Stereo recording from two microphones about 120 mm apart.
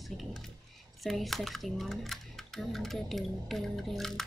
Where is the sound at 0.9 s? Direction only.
Centre (ahead or behind).